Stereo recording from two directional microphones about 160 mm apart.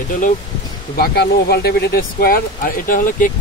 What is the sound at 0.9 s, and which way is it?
Speech, 75° left (ahead or behind).